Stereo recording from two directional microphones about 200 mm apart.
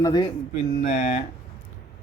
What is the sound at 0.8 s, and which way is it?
Speech, 35° left (ahead or behind).